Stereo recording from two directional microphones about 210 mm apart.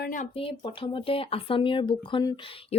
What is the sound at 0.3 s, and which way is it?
Speech, 25° left (ahead or behind).